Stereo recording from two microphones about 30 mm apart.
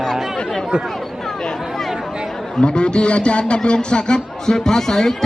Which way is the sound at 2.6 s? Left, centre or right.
Left.